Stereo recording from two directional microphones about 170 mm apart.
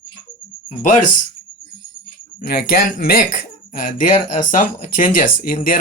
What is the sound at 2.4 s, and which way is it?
Speech, 60° left (ahead or behind).